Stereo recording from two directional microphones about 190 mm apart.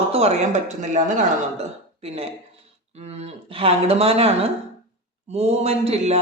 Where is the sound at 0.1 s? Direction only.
35° right (ahead or behind).